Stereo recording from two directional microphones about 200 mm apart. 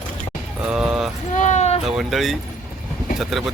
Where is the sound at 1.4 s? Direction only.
35° left (ahead or behind).